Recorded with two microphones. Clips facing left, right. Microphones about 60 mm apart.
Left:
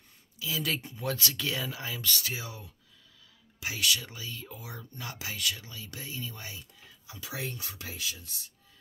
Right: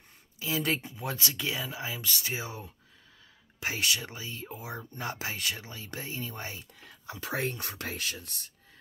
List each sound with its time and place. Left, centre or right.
0.4 s speech: right
0.7 s speech: centre; by 6.6 s right
6.8 s speech: right